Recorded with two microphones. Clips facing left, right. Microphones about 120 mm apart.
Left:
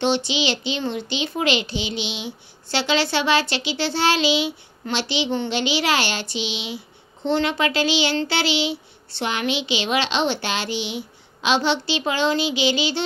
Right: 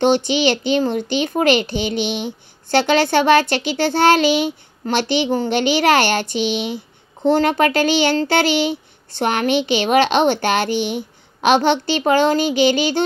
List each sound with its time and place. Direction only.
0.0 s a child's voice: 50° right (ahead or behind)